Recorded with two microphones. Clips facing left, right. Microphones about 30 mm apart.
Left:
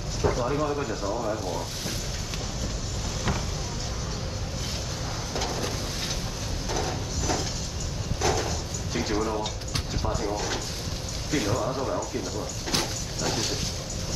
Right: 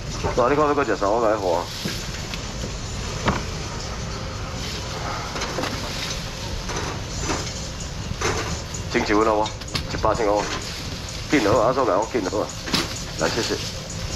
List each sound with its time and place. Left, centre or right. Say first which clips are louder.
0.2 s speech: right 7 dB; right
3.3 s vehicle: right 7 dB; right
5.0 s a sound: right 3 dB; right
8.2 s a sound: right 1 dB; right
8.5 s music: right 2 dB; right
10.0 s speech: right 11 dB; right
10.3 s speech: right 7 dB; right
11.2 s speech: right 10 dB; right